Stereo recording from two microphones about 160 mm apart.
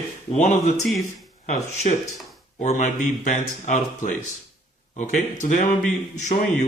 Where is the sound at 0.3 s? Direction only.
45° left (ahead or behind).